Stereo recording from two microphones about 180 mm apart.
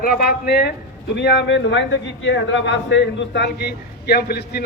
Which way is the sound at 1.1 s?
75° left (ahead or behind).